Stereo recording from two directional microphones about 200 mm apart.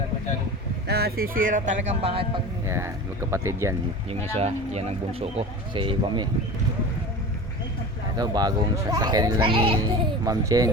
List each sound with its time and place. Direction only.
0.9 s speech: 50° right (ahead or behind); by 2.4 s 30° right (ahead or behind)
2.6 s speech: 15° right (ahead or behind)
4.1 s speech: 30° right (ahead or behind)
8.1 s speech: 20° right (ahead or behind)